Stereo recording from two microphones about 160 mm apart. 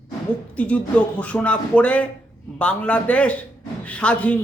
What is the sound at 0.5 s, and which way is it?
Speech, 10° left (ahead or behind).